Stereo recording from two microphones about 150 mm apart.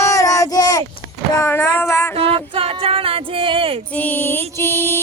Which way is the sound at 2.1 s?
40° right (ahead or behind).